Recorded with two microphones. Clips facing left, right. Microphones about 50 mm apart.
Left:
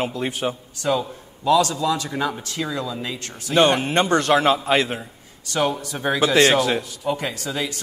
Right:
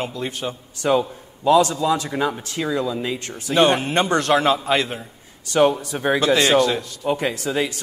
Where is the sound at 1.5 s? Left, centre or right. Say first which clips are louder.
Right 2 dB; right.